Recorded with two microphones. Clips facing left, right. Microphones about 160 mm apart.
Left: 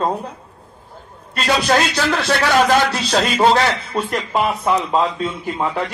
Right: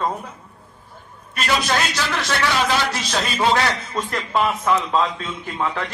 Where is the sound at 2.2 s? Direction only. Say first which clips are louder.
Left 5 dB; 50° left (ahead or behind).